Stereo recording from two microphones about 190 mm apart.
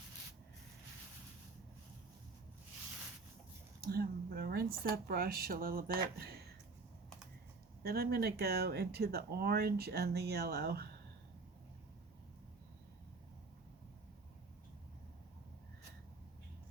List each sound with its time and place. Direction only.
3.8 s a sound: 55° right (ahead or behind)
4.8 s speech: 50° right (ahead or behind)
7.8 s speech: 55° right (ahead or behind)